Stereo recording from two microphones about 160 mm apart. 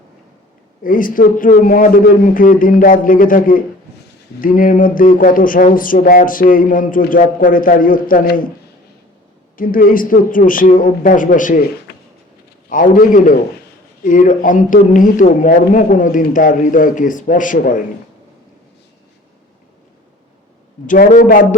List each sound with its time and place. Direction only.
0.8 s speech: 60° left (ahead or behind)
9.6 s speech: 60° left (ahead or behind)
12.6 s speech: 55° left (ahead or behind)
20.8 s speech: 55° left (ahead or behind)